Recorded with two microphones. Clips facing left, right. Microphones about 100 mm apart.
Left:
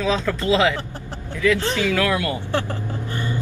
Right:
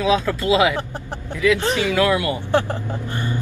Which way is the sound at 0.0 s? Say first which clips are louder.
Right 3 dB; 10° right (ahead or behind).